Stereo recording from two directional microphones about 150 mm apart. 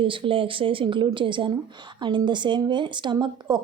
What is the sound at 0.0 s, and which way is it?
A woman's voice, 35° right (ahead or behind).